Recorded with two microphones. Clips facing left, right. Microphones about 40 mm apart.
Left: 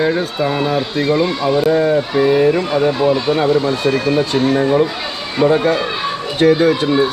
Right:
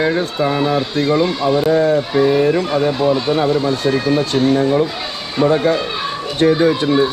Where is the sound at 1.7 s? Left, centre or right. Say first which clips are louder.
Even; centre.